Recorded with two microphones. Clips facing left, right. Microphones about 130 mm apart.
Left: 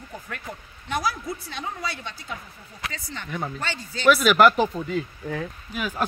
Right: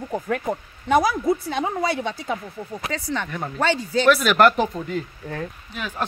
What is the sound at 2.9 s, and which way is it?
Speech, 65° right (ahead or behind).